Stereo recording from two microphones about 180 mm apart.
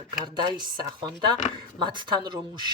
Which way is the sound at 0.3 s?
25° right (ahead or behind).